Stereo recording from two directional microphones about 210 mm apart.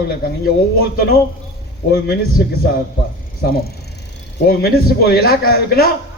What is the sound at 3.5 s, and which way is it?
A man's voice, 50° left (ahead or behind).